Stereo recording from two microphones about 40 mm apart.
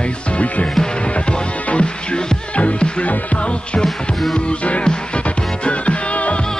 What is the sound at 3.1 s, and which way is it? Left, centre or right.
Speech, left.